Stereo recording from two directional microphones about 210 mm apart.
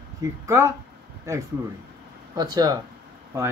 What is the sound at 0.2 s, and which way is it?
Speech, 15° right (ahead or behind).